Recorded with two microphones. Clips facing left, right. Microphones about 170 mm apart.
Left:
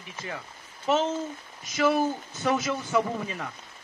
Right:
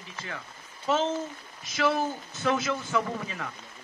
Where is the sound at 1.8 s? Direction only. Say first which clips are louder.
Left 3 dB; 15° left (ahead or behind).